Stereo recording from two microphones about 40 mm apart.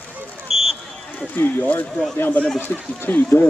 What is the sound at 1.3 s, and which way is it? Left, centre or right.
Speech, left.